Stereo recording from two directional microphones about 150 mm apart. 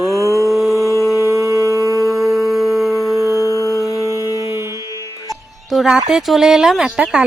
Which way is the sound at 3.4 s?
20° left (ahead or behind).